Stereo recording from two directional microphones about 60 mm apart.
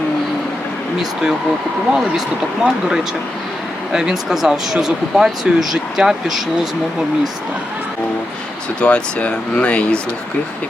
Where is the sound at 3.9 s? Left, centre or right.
Centre.